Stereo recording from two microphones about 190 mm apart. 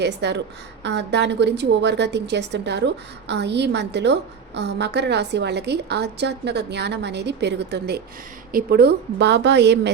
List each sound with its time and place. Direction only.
0.0 s a woman's voice: 65° right (ahead or behind)